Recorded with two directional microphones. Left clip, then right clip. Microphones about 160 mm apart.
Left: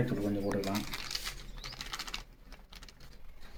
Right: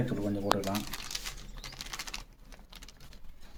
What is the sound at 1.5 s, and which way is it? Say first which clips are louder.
Typing: even; 15° right (ahead or behind).